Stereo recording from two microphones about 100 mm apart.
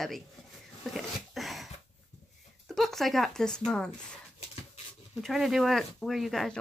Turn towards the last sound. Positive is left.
turn(degrees=0)  # may be behind; listen again after turning